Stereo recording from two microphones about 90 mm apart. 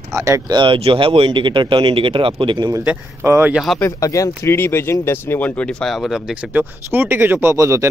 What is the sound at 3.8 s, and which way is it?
Speech, 40° left (ahead or behind).